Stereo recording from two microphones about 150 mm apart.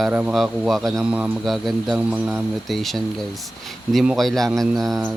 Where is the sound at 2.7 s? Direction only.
Centre (ahead or behind).